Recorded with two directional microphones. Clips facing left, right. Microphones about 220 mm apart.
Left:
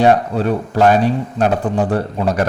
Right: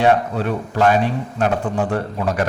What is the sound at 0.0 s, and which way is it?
A man's voice, 35° left (ahead or behind).